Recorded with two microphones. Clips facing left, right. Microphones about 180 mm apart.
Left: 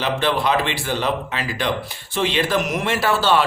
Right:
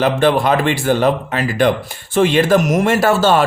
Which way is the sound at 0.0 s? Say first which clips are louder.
Right 7 dB; 50° right (ahead or behind).